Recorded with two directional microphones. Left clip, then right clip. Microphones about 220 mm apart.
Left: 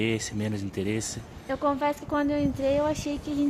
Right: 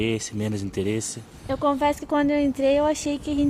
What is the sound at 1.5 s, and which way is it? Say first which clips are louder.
Speech: right 4 dB; 30° right (ahead or behind).